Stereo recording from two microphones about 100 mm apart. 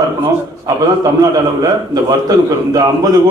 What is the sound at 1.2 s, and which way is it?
A man's voice, 40° right (ahead or behind).